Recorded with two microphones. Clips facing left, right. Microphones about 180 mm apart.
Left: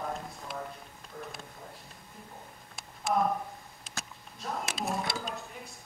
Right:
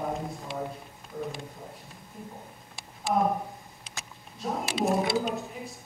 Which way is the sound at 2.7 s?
Centre (ahead or behind).